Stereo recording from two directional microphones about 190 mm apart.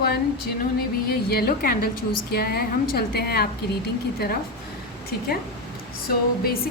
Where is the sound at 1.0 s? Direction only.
55° left (ahead or behind).